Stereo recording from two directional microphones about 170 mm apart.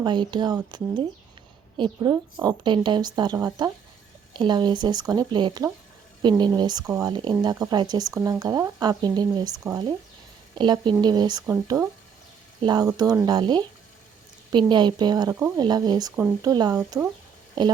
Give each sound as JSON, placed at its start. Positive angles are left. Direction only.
{"t": 0.0, "sound": "speech", "side_deg": -25}
{"t": 17.6, "sound": "speech", "side_deg": -25}